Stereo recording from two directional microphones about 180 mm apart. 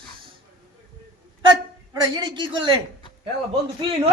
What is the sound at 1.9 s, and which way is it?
Speech, 20° right (ahead or behind).